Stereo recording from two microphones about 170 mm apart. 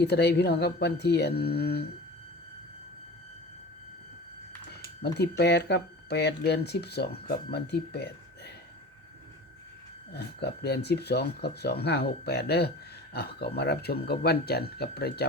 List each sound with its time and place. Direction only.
0.0 s speech: 75° left (ahead or behind)
5.4 s speech: 75° left (ahead or behind)
10.1 s speech: 75° left (ahead or behind)